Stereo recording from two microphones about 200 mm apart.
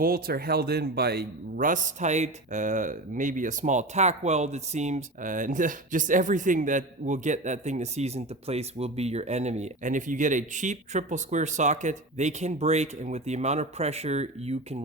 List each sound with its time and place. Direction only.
0.0 s speech: 45° right (ahead or behind); by 14.8 s 30° right (ahead or behind)